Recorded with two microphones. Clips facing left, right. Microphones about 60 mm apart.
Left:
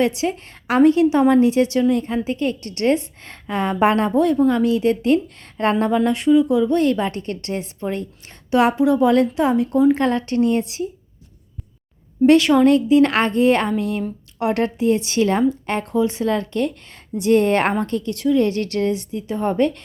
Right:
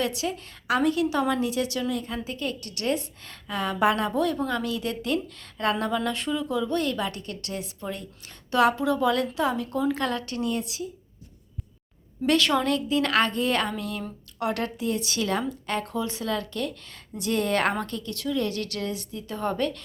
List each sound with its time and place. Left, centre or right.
0.0 s a woman's voice: left
6.8 s a woman's voice: left
8.4 s a woman's voice: left
12.2 s a woman's voice: left
19.5 s a woman's voice: left